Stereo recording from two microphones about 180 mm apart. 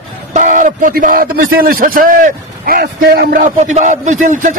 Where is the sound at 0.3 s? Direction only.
45° right (ahead or behind).